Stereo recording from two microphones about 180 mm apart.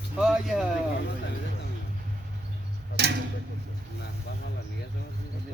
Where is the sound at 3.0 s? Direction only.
65° right (ahead or behind).